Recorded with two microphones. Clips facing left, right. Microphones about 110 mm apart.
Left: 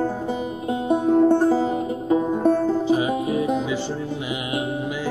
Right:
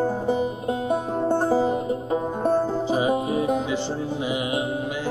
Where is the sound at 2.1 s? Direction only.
35° right (ahead or behind).